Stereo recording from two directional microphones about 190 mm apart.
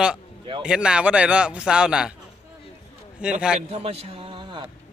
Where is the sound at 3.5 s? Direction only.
30° right (ahead or behind).